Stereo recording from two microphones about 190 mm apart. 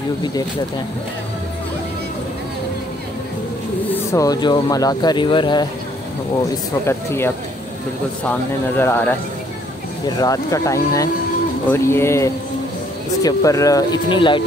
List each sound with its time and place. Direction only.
3.9 s speech: 15° left (ahead or behind)
6.9 s speech: 15° left (ahead or behind)
8.3 s speech: 10° left (ahead or behind)